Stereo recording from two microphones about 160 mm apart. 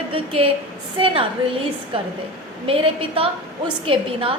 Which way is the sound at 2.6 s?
35° right (ahead or behind).